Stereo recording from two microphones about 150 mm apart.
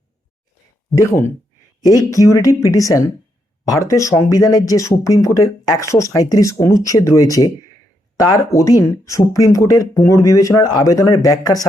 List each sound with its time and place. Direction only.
0.9 s speech: 15° left (ahead or behind)